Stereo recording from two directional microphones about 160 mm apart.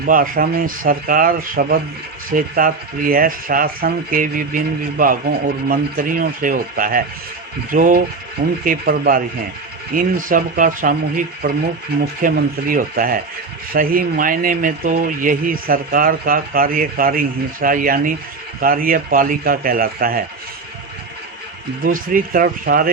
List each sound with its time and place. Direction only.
0.0 s speech: 60° right (ahead or behind)
21.8 s speech: 60° right (ahead or behind)